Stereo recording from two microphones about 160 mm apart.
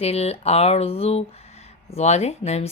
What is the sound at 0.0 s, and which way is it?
Speech, 40° left (ahead or behind).